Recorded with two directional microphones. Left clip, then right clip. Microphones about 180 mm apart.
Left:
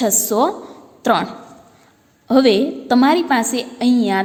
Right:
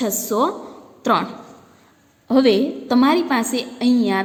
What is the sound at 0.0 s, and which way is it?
A woman's voice, 25° left (ahead or behind).